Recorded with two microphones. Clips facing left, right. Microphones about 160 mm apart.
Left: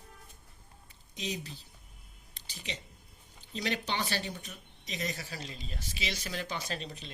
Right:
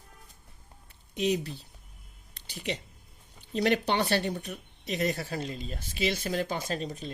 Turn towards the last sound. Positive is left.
turn(degrees=-45)  # may be behind; listen again after turning